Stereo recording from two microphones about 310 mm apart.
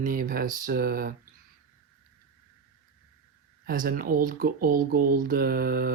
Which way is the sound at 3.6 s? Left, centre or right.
Right.